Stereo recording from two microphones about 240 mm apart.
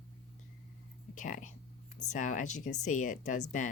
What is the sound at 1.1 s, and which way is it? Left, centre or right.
Speech, left.